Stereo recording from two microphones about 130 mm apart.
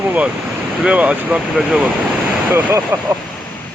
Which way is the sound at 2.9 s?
20° right (ahead or behind).